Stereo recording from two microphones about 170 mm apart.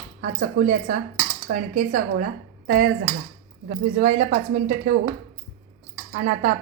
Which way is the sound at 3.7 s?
50° right (ahead or behind).